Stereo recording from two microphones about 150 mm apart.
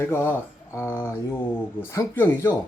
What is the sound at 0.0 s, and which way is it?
Speech, 15° left (ahead or behind).